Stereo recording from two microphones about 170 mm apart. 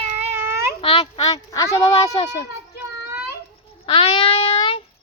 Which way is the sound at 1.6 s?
20° left (ahead or behind).